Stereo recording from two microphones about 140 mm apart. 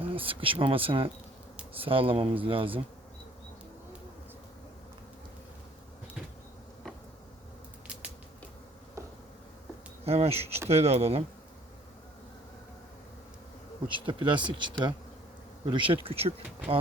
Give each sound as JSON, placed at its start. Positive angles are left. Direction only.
{"t": 0.0, "sound": "speech", "side_deg": -40}
{"t": 10.0, "sound": "speech", "side_deg": -45}
{"t": 13.9, "sound": "speech", "side_deg": -35}